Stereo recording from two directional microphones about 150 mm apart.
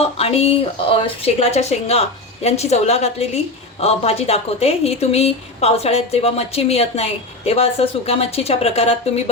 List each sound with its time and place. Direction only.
0.0 s speech: 40° left (ahead or behind)